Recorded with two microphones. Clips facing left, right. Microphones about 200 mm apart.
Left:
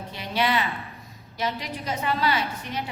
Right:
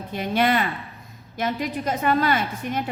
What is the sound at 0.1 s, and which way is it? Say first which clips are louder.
A woman's voice: right 4 dB; 50° right (ahead or behind).